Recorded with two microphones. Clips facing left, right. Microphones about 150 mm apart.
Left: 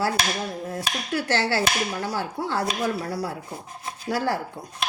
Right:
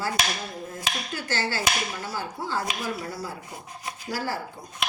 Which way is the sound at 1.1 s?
70° left (ahead or behind).